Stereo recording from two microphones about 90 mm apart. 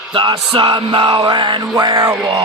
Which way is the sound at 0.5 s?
70° right (ahead or behind).